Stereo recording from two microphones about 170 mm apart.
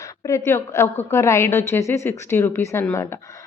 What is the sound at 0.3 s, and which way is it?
Speech, 15° left (ahead or behind).